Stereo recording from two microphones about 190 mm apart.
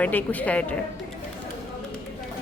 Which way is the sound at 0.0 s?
10° left (ahead or behind).